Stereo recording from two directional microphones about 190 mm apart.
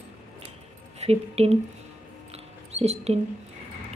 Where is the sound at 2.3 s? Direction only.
35° right (ahead or behind).